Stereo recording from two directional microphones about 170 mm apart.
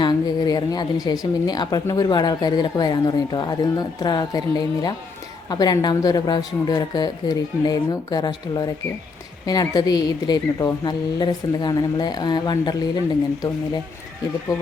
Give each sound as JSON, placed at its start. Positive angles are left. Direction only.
{"t": 0.0, "sound": "speech", "side_deg": 25}